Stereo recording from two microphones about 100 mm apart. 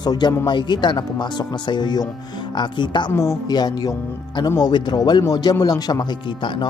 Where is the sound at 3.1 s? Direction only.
30° left (ahead or behind).